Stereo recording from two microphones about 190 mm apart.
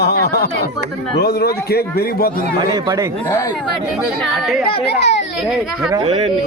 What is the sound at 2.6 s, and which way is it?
Speech, 20° right (ahead or behind).